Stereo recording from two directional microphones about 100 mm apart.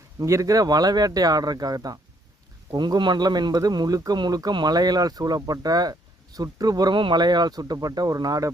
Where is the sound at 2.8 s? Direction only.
50° right (ahead or behind).